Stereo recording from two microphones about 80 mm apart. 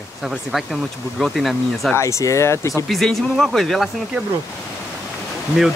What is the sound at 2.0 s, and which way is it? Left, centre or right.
Speech, left.